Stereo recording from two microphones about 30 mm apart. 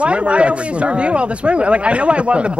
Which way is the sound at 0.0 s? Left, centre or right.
Right.